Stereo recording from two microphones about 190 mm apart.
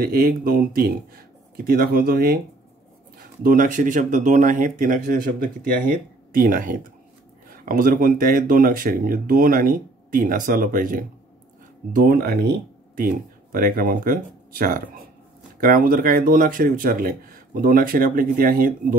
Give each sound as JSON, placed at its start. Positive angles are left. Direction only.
{"t": 0.0, "sound": "speech", "side_deg": -50}
{"t": 3.4, "sound": "speech", "side_deg": -45}